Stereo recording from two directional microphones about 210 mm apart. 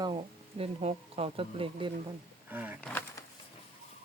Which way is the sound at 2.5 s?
10° right (ahead or behind).